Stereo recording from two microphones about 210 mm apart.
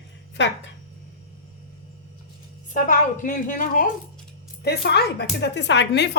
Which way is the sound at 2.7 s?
40° left (ahead or behind).